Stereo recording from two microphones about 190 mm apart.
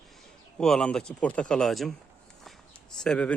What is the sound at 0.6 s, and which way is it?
Speech, 5° left (ahead or behind).